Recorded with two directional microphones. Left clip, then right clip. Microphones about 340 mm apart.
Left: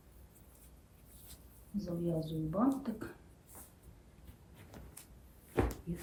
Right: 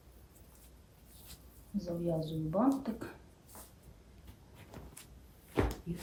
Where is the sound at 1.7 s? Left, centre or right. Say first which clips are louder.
Right 2 dB; centre.